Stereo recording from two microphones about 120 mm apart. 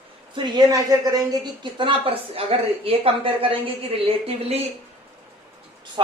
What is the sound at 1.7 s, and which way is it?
A woman's voice, 50° right (ahead or behind).